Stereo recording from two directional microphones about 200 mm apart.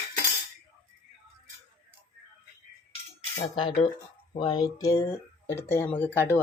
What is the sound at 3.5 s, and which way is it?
Speech, 25° left (ahead or behind).